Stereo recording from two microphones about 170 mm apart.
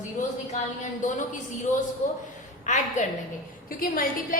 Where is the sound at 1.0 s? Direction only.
50° left (ahead or behind).